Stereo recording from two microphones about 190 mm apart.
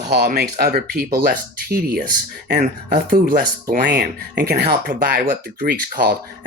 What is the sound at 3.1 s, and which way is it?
Speech, 45° right (ahead or behind).